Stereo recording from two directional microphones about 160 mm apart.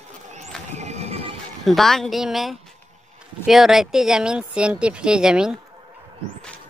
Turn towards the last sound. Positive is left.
turn(degrees=-5)  # may be behind; listen again after turning